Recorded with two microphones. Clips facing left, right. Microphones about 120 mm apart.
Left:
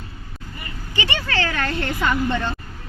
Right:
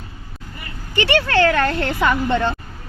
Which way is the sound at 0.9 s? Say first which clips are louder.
Right 8 dB; 65° right (ahead or behind).